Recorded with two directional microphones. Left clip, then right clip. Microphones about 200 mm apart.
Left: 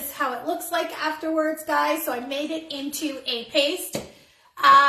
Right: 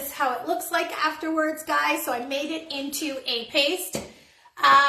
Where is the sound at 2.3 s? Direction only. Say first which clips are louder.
Even; 15° right (ahead or behind).